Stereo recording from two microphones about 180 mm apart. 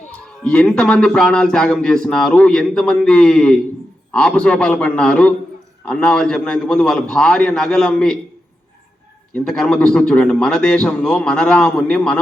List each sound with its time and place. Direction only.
0.1 s a man's voice: 5° left (ahead or behind)
9.3 s a man's voice: 5° left (ahead or behind)